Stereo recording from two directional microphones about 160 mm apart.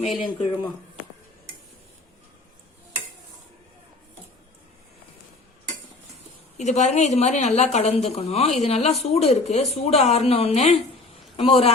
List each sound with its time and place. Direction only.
0.2 s a woman's voice: 30° left (ahead or behind)
6.6 s a woman's voice: 45° left (ahead or behind)